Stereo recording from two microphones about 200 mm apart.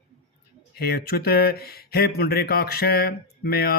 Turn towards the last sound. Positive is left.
turn(degrees=50)  # may be behind; listen again after turning